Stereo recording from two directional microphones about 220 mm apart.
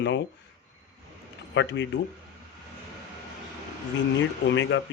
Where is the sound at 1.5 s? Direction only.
55° left (ahead or behind).